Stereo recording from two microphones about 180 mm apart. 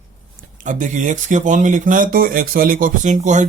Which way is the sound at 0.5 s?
45° right (ahead or behind).